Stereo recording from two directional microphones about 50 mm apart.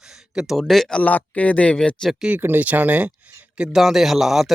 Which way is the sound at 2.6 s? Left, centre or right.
Right.